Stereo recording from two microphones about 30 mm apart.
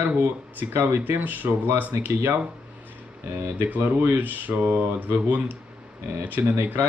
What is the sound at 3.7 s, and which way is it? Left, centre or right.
Speech, right.